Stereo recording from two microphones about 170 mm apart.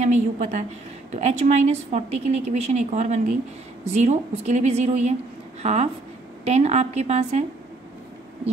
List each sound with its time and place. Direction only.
0.0 s a woman's voice: 45° right (ahead or behind)